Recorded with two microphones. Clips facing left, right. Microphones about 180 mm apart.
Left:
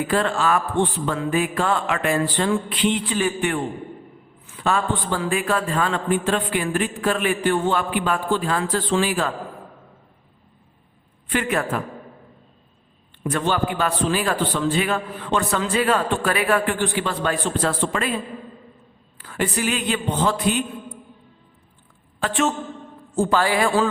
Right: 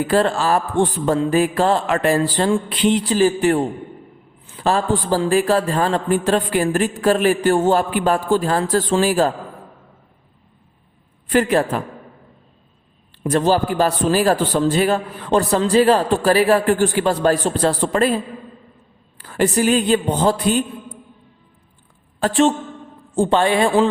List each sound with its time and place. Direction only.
0.1 s a man's voice: 35° right (ahead or behind)
11.3 s a man's voice: 35° right (ahead or behind)
13.2 s a man's voice: 35° right (ahead or behind)
19.2 s a man's voice: 35° right (ahead or behind)
22.2 s a man's voice: 35° right (ahead or behind)